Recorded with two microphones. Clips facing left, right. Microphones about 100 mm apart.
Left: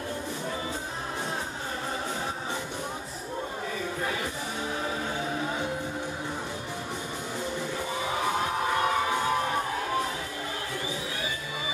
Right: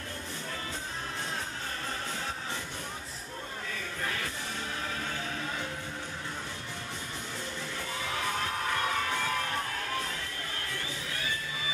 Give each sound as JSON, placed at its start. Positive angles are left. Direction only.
{"t": 4.0, "sound": "music", "side_deg": 15}
{"t": 8.0, "sound": "crowd", "side_deg": 15}